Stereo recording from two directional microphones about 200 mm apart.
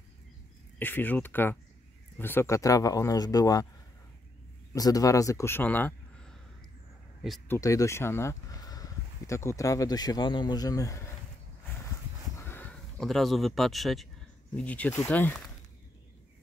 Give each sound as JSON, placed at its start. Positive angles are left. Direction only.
{"t": 0.7, "sound": "speech", "side_deg": 10}
{"t": 4.7, "sound": "a man's voice", "side_deg": 15}
{"t": 7.4, "sound": "speech", "side_deg": 15}
{"t": 12.4, "sound": "speech", "side_deg": 10}